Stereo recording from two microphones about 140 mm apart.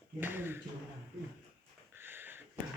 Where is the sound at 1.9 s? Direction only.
15° right (ahead or behind).